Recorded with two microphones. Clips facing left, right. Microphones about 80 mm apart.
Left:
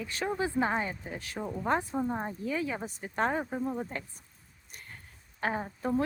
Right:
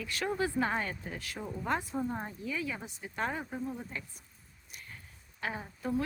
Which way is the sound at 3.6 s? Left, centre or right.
Left.